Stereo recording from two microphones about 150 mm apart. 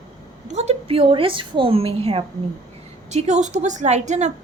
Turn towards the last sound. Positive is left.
turn(degrees=-50)  # may be behind; listen again after turning